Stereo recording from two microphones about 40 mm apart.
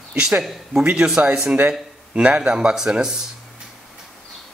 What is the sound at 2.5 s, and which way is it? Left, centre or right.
Speech, centre.